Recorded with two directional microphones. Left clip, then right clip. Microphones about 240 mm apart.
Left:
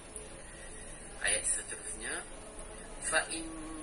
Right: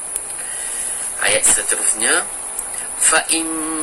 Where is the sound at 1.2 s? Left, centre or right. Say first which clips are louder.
Right 17 dB; right.